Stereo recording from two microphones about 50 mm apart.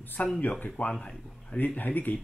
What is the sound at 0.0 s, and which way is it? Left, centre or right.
Speech, left.